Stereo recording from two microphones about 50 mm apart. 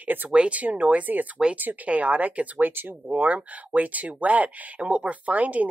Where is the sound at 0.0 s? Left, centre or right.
Right.